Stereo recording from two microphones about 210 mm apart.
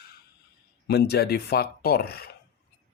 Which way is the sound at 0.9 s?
50° left (ahead or behind).